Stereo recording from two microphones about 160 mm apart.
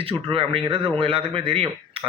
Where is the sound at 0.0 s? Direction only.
35° right (ahead or behind).